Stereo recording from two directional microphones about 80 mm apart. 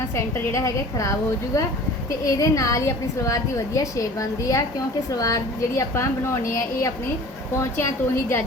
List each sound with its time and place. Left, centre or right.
0.3 s a woman's voice: left
7.6 s a woman's voice: left